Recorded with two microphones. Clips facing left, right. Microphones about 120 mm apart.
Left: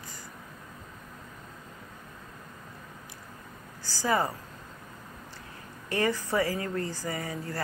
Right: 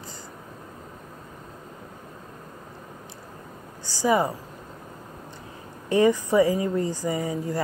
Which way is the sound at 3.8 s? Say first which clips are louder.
Right 5 dB; 15° right (ahead or behind).